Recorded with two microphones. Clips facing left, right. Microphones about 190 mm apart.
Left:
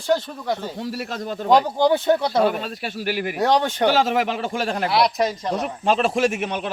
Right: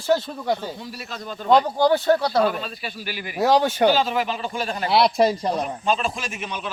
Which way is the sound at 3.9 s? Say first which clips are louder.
Left 2 dB; 80° left.